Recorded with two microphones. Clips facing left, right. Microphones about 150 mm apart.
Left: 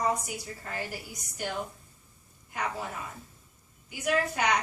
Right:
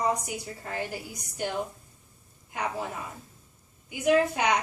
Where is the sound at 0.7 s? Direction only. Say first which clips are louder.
Right 3 dB; 20° right (ahead or behind).